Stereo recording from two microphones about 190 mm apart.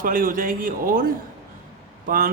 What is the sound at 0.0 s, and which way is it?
Speech, 45° right (ahead or behind).